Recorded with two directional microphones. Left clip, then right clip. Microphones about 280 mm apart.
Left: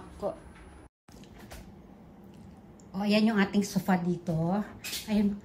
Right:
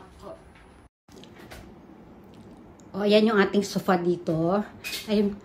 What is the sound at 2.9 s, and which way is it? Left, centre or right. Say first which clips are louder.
A woman's voice: right 8 dB; centre.